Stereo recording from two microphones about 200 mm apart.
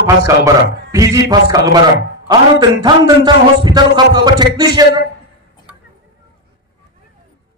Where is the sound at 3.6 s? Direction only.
20° right (ahead or behind).